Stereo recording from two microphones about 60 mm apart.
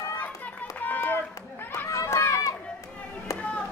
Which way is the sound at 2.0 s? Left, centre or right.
Left.